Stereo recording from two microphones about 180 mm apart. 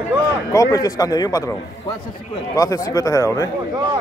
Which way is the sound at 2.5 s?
20° left (ahead or behind).